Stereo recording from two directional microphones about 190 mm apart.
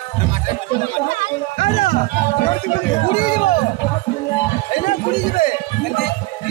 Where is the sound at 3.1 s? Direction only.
45° left (ahead or behind).